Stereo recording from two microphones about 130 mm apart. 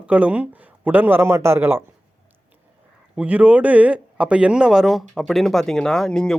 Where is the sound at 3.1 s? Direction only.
10° right (ahead or behind).